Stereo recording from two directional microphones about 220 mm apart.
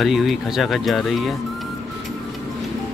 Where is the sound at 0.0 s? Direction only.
Centre (ahead or behind).